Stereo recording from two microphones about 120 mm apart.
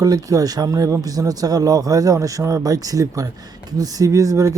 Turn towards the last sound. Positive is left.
turn(degrees=-25)  # may be behind; listen again after turning